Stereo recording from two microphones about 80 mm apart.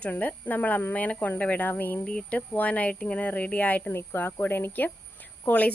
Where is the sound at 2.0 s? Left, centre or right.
Centre.